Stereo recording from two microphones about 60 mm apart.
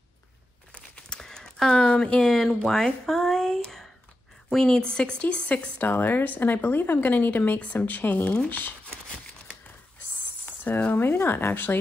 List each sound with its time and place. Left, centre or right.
0.7 s speech: centre
5.8 s speech: left
10.9 s speech: left